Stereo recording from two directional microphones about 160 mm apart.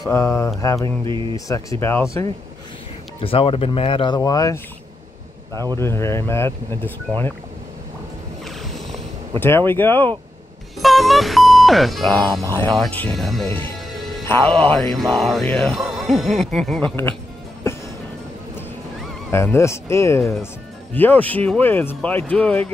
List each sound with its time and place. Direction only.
0.1 s speech: 15° left (ahead or behind)
0.6 s mantra: 20° left (ahead or behind)
0.8 s a sound: 30° right (ahead or behind)
1.3 s speech: 20° left (ahead or behind)
3.2 s speech: 35° left (ahead or behind)
5.8 s speech: 15° left (ahead or behind)
8.5 s a sound: centre (ahead or behind)
9.4 s speech: 15° left (ahead or behind)
10.8 s speech: centre (ahead or behind)
12.1 s speech: 10° left (ahead or behind)
13.5 s speech: 15° left (ahead or behind)
19.3 s speech: 15° left (ahead or behind)